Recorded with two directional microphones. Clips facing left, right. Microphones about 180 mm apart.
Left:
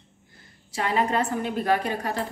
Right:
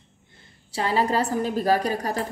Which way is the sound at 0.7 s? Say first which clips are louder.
Right 2 dB; 30° right (ahead or behind).